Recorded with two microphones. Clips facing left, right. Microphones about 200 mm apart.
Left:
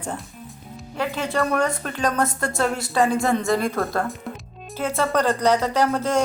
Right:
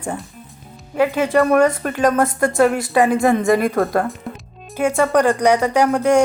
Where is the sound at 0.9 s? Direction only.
15° right (ahead or behind).